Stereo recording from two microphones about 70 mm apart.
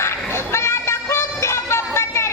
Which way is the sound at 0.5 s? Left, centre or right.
Left.